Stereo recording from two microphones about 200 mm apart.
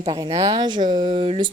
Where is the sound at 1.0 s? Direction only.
35° right (ahead or behind).